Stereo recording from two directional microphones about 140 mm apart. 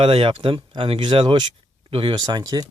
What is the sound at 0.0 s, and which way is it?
Speech, 40° right (ahead or behind).